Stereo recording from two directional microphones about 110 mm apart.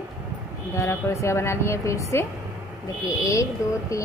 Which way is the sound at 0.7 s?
25° left (ahead or behind).